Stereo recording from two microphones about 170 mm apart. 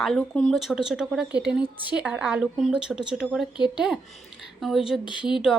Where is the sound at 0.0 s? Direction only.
5° left (ahead or behind).